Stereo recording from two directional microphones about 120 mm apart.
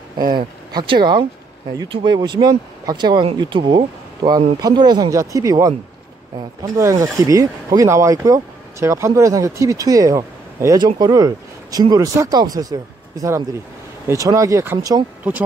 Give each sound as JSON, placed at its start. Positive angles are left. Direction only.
{"t": 0.3, "sound": "speech", "side_deg": -40}